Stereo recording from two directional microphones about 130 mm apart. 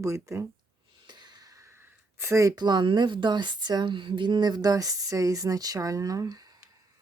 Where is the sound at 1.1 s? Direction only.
35° right (ahead or behind).